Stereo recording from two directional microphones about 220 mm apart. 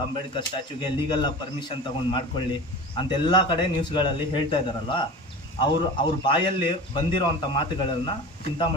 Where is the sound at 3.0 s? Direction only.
20° left (ahead or behind).